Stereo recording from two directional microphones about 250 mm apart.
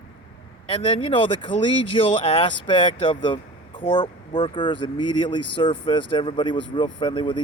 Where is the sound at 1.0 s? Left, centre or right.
Centre.